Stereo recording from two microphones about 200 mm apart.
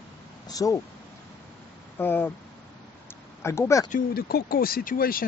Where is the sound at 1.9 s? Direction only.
10° left (ahead or behind).